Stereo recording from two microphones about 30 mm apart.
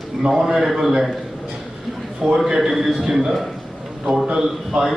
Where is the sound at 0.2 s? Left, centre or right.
Centre.